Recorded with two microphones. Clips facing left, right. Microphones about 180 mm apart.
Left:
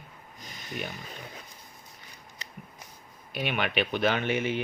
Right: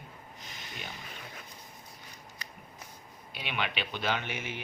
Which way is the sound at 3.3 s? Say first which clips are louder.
Left 7 dB; 50° left (ahead or behind).